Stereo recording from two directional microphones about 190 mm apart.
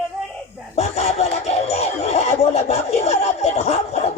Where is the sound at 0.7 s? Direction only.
35° left (ahead or behind).